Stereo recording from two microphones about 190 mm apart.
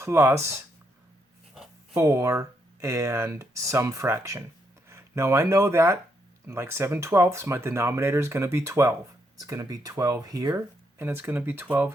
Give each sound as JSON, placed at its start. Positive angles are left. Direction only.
{"t": 0.0, "sound": "speech", "side_deg": -15}
{"t": 2.0, "sound": "speech", "side_deg": -15}